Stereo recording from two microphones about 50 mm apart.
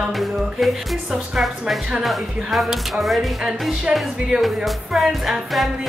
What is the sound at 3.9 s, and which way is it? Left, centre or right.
Speech, centre.